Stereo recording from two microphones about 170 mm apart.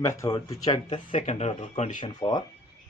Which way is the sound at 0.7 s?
30° left (ahead or behind).